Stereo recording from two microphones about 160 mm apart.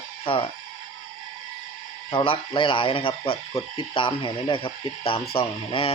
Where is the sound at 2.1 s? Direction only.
35° left (ahead or behind).